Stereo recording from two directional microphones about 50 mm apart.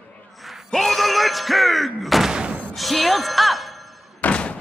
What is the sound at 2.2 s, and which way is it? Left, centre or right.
Thump, centre.